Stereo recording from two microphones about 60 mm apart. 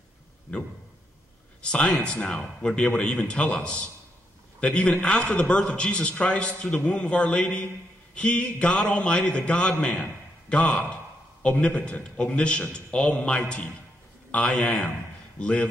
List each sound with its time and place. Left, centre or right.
1.6 s a sound: centre
2.0 s a man's voice: centre
4.6 s a man's voice: left